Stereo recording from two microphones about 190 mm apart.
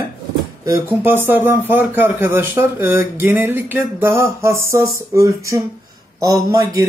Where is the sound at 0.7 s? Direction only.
15° right (ahead or behind).